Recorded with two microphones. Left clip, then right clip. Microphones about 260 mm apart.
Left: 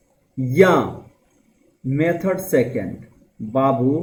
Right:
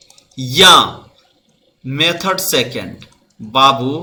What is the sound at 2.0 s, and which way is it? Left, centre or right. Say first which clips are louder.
Speech: right 5 dB; centre.